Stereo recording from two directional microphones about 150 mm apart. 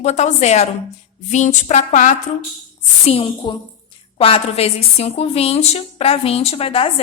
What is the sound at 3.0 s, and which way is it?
A woman's voice, 45° left (ahead or behind).